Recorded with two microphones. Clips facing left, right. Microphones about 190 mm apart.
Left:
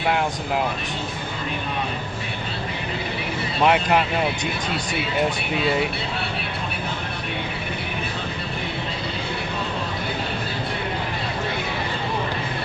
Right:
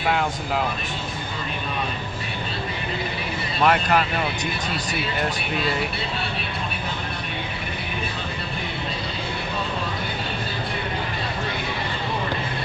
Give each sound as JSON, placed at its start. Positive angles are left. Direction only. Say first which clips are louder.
{"t": 3.6, "sound": "speech", "louder": "left 1 dB", "side_deg": 20}